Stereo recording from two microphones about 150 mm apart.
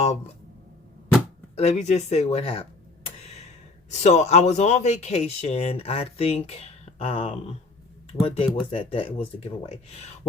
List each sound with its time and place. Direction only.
1.5 s speech: 45° left (ahead or behind)
3.8 s speech: 50° left (ahead or behind)